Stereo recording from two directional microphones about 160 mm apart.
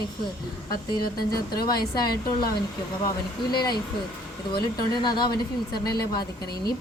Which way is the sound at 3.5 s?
25° left (ahead or behind).